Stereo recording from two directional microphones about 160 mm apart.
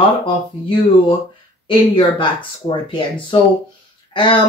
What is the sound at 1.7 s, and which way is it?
A woman's voice, 35° left (ahead or behind).